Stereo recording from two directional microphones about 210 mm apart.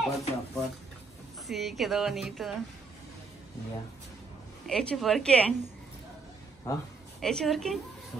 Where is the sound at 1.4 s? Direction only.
Centre (ahead or behind).